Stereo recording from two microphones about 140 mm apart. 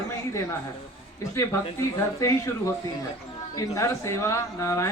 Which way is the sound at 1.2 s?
20° left (ahead or behind).